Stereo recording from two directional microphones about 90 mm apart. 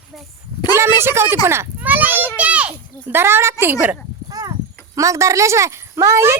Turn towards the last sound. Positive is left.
turn(degrees=-30)  # may be behind; listen again after turning